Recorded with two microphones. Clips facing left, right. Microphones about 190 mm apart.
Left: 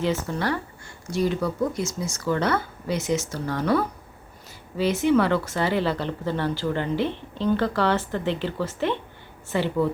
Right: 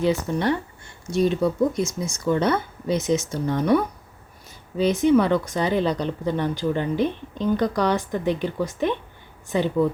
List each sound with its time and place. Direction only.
0.0 s speech: 15° right (ahead or behind)